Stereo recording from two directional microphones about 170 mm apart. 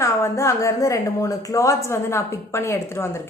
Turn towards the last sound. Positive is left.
turn(degrees=15)  # may be behind; listen again after turning